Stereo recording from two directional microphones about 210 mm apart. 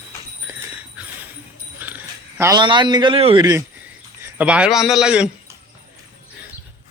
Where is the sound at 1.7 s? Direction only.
10° right (ahead or behind).